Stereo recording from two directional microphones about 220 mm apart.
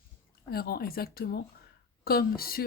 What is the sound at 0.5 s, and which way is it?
Speech, 45° left (ahead or behind).